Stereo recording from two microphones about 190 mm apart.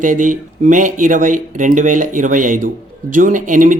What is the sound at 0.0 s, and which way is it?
Speech, 45° right (ahead or behind).